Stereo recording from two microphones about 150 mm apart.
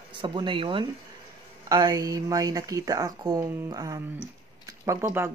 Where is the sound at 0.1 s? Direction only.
30° right (ahead or behind).